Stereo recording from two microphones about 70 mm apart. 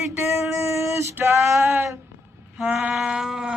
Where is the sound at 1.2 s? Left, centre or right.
Right.